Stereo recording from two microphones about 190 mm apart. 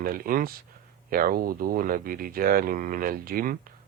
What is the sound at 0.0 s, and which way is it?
Speech, 50° right (ahead or behind).